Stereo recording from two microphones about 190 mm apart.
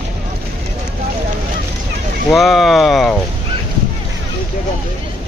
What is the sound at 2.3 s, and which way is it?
Speech, centre (ahead or behind).